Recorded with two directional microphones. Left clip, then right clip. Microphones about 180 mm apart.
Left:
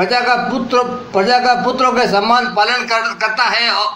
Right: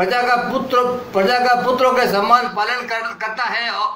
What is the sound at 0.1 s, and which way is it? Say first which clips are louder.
A man's voice: left 2 dB; 30° left (ahead or behind).